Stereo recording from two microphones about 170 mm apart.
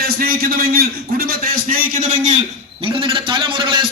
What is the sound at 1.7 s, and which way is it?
Speech, 50° right (ahead or behind).